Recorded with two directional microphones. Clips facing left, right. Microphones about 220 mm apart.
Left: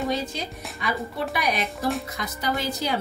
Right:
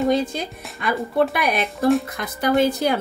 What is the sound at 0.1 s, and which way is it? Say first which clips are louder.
A woman's voice: right 7 dB; 50° right (ahead or behind).